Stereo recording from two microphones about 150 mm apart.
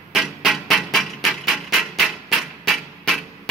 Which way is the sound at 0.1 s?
Centre (ahead or behind).